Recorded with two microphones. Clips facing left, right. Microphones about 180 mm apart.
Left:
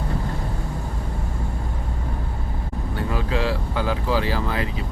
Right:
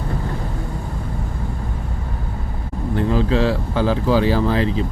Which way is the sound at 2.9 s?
25° right (ahead or behind).